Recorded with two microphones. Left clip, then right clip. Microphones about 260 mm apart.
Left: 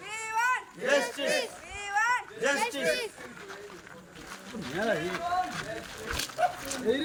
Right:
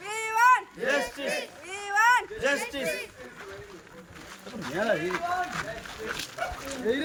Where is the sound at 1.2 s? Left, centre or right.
Centre.